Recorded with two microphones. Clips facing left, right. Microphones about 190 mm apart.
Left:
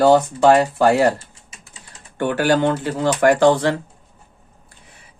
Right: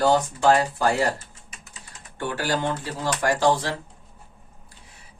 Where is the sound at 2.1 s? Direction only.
60° left (ahead or behind).